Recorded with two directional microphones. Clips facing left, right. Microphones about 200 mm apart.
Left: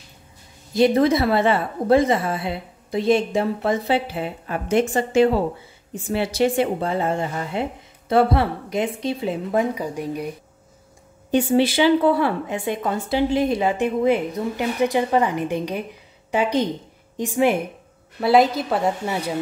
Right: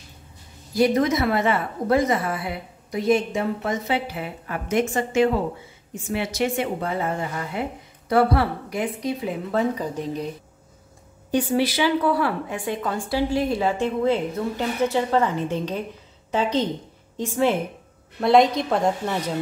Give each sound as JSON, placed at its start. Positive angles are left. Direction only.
{"t": 0.7, "sound": "a woman's voice", "side_deg": 30}
{"t": 9.5, "sound": "a woman's voice", "side_deg": 10}
{"t": 11.3, "sound": "a woman's voice", "side_deg": 25}
{"t": 18.2, "sound": "a woman's voice", "side_deg": 5}